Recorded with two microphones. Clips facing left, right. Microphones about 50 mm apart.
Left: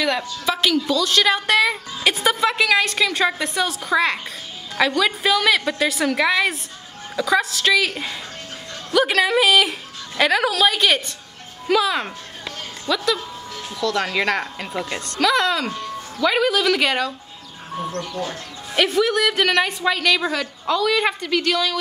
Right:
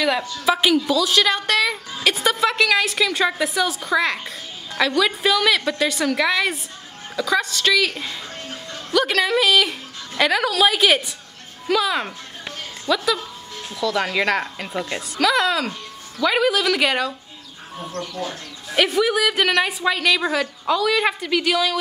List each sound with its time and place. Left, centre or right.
0.5 s a woman's voice: centre
12.8 s a sound: centre
13.7 s a woman's voice: centre
17.8 s speech: left
18.2 s a woman's voice: centre